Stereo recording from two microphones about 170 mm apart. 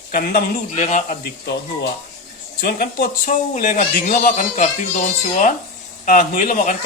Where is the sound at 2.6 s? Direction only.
60° left (ahead or behind).